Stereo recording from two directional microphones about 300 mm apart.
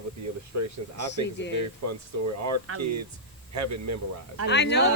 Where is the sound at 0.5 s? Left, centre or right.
Right.